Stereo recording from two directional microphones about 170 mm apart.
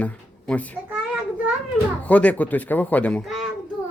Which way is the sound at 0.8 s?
5° right (ahead or behind).